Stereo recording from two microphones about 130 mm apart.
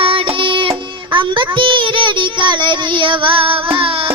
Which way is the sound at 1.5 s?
40° right (ahead or behind).